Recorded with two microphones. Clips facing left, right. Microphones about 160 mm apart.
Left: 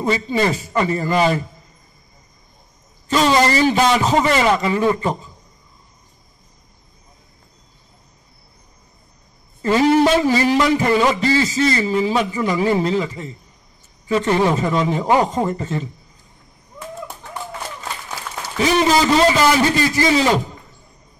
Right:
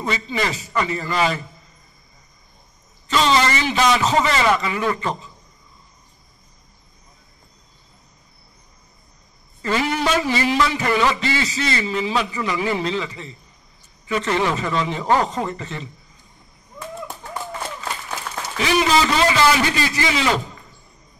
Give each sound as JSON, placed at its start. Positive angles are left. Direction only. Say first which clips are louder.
{"t": 0.0, "sound": "a man's voice", "louder": "left 5 dB", "side_deg": 30}
{"t": 0.8, "sound": "a man's voice", "louder": "left 6 dB", "side_deg": 45}
{"t": 3.3, "sound": "a man's voice", "louder": "left 5 dB", "side_deg": 40}
{"t": 3.7, "sound": "a man's voice", "louder": "left 2 dB", "side_deg": 15}
{"t": 4.2, "sound": "a man's voice", "louder": "left 3 dB", "side_deg": 35}
{"t": 9.8, "sound": "a man's voice", "louder": "left 8 dB", "side_deg": 35}
{"t": 14.0, "sound": "a man's voice", "louder": "left 4 dB", "side_deg": 35}
{"t": 14.8, "sound": "a man's voice", "louder": "left 4 dB", "side_deg": 40}
{"t": 15.0, "sound": "a man's voice", "louder": "left 1 dB", "side_deg": 10}
{"t": 15.5, "sound": "a man's voice", "louder": "left 7 dB", "side_deg": 40}
{"t": 18.6, "sound": "a man's voice", "louder": "left 3 dB", "side_deg": 35}